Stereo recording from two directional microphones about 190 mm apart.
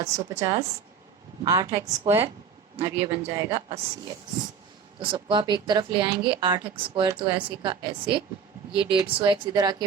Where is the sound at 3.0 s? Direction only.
30° right (ahead or behind).